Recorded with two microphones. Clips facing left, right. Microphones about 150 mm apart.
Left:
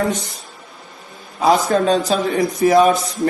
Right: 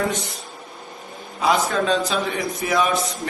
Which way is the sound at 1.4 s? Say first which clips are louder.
Left 5 dB; 40° left (ahead or behind).